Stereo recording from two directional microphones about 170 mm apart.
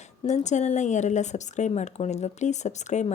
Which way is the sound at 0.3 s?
45° left (ahead or behind).